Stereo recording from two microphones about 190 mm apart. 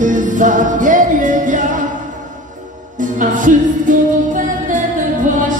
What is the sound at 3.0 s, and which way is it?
Music, 45° right (ahead or behind).